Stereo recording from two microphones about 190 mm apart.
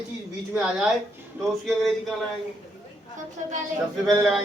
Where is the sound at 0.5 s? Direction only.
5° right (ahead or behind).